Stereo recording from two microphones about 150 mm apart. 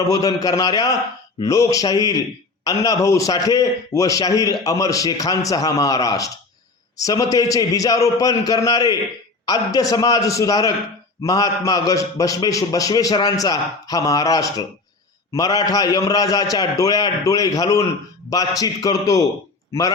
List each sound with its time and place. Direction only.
0.1 s a man's voice: 25° left (ahead or behind)
9.9 s a man's voice: 25° left (ahead or behind)